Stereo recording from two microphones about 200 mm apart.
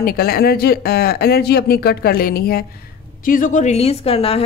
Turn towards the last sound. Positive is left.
turn(degrees=30)  # may be behind; listen again after turning